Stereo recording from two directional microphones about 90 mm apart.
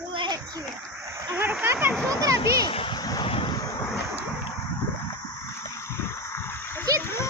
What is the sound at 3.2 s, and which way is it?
Vehicle, 75° left (ahead or behind).